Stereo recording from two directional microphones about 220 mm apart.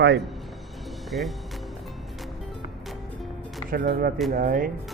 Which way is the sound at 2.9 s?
Centre (ahead or behind).